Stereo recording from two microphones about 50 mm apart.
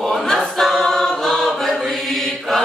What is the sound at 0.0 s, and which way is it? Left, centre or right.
Choir, centre.